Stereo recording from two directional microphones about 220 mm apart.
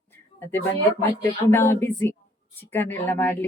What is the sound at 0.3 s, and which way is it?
A woman's voice, 10° left (ahead or behind).